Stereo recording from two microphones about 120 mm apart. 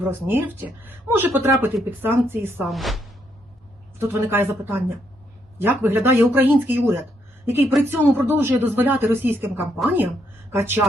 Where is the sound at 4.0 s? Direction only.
20° right (ahead or behind).